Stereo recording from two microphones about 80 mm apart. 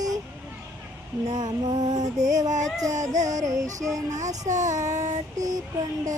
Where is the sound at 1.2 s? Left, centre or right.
Right.